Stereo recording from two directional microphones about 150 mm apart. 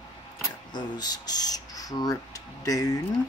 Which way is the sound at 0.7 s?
25° left (ahead or behind).